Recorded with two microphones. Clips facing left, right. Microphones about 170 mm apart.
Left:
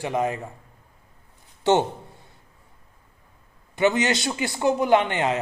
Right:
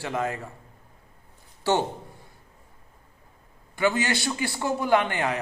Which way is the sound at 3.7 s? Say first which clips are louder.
Left 3 dB; 20° left (ahead or behind).